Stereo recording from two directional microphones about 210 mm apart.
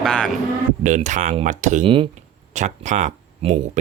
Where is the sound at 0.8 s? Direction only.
35° right (ahead or behind).